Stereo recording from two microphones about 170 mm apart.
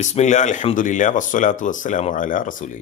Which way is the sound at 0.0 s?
40° left (ahead or behind).